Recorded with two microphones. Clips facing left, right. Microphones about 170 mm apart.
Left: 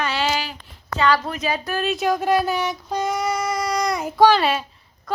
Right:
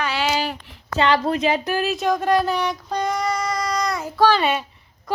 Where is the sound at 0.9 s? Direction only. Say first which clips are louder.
Right 2 dB; 30° right (ahead or behind).